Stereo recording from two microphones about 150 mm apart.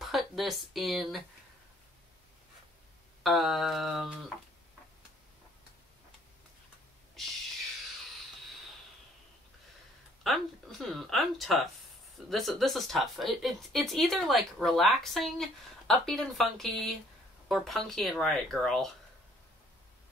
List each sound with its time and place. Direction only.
0.0 s speech: centre (ahead or behind)
3.3 s speech: centre (ahead or behind)
7.2 s a sound: centre (ahead or behind)
10.2 s speech: centre (ahead or behind)